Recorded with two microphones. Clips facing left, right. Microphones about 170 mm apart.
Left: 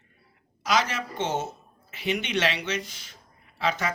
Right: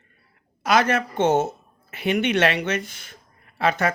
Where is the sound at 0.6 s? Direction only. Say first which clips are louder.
Right 6 dB; 55° right (ahead or behind).